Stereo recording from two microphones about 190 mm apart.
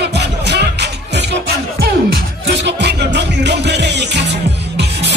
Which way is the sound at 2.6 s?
60° right (ahead or behind).